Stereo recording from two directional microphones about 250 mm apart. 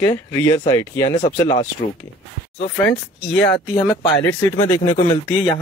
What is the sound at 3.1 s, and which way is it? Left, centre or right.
Speech, centre.